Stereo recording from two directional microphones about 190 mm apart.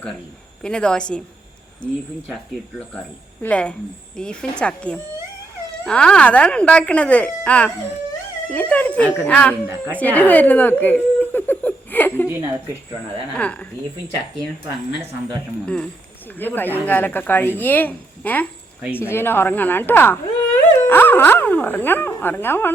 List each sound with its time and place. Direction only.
0.6 s speech: 5° left (ahead or behind)
3.4 s speech: 5° left (ahead or behind)
12.3 s speech: 15° right (ahead or behind)
13.3 s speech: 5° left (ahead or behind)
15.6 s speech: 5° left (ahead or behind)